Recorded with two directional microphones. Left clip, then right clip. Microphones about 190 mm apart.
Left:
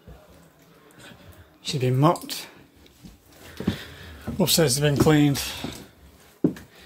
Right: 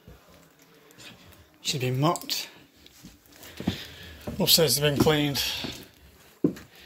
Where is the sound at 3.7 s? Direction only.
35° left (ahead or behind).